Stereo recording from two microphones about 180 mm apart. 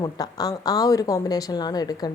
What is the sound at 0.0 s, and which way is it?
A woman's voice, 20° left (ahead or behind).